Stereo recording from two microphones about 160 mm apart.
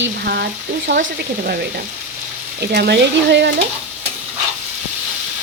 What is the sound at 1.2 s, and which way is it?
Speech, 75° right (ahead or behind).